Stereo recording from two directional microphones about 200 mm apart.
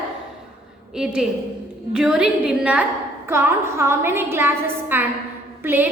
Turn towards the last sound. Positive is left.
turn(degrees=-10)  # may be behind; listen again after turning